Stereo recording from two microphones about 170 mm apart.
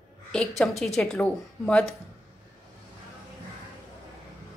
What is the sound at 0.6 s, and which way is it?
Speech, centre (ahead or behind).